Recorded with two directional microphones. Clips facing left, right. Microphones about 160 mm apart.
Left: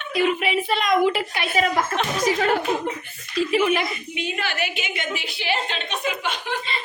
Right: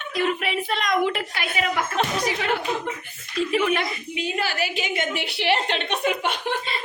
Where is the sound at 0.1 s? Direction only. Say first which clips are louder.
Left 3 dB; 5° left (ahead or behind).